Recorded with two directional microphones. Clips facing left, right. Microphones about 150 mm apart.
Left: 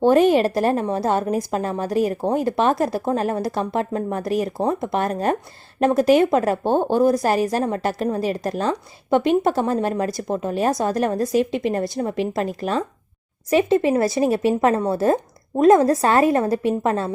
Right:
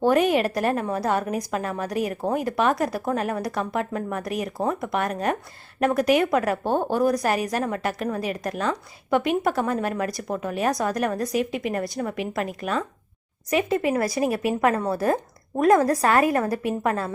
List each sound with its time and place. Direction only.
0.0 s a woman's voice: 30° left (ahead or behind)